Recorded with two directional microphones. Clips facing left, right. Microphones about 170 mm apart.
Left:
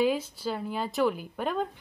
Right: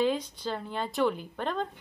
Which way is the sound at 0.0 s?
5° left (ahead or behind).